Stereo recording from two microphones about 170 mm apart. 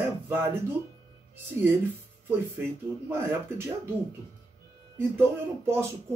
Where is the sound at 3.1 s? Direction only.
15° right (ahead or behind).